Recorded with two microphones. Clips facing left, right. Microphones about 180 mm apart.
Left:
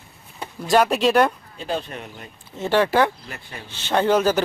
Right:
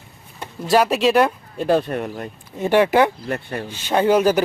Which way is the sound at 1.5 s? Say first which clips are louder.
Right 9 dB; 60° right (ahead or behind).